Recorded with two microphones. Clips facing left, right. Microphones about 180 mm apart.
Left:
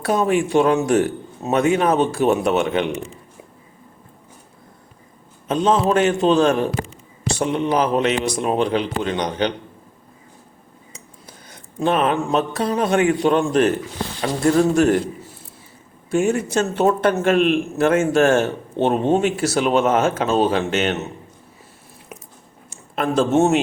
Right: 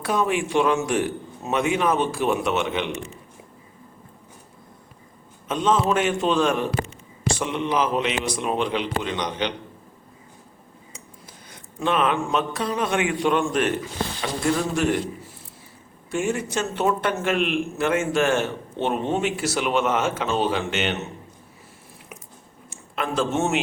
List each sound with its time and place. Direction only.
0.1 s a man's voice: 40° left (ahead or behind)
5.5 s a man's voice: 35° left (ahead or behind)
11.8 s a man's voice: 40° left (ahead or behind)
16.1 s a man's voice: 45° left (ahead or behind)
23.0 s a man's voice: 40° left (ahead or behind)